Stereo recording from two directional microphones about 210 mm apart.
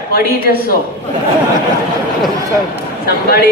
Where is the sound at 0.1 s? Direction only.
45° left (ahead or behind).